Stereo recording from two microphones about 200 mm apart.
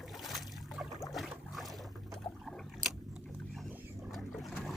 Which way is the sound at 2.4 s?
Centre (ahead or behind).